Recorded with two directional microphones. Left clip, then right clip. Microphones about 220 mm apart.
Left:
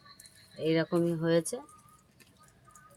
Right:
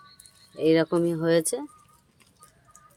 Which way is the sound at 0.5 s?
40° right (ahead or behind).